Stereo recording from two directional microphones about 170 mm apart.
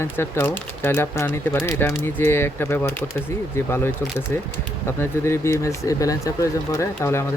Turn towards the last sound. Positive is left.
turn(degrees=15)  # may be behind; listen again after turning